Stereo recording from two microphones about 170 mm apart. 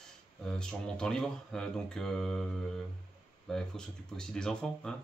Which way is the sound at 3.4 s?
5° left (ahead or behind).